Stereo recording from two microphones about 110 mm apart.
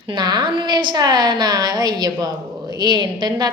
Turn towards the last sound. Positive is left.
turn(degrees=-40)  # may be behind; listen again after turning